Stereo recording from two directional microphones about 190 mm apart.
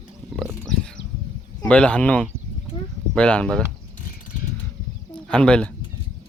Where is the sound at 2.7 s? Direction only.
25° left (ahead or behind).